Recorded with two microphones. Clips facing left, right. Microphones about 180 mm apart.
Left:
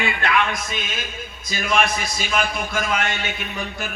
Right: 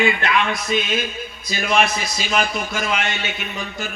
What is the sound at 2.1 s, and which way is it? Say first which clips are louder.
Speech: right 3 dB; 50° left (ahead or behind).